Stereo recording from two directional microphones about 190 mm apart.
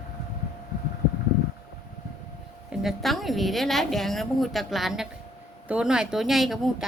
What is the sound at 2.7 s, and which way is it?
A woman's voice, centre (ahead or behind).